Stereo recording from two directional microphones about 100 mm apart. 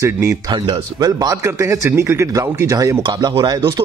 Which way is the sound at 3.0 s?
45° right (ahead or behind).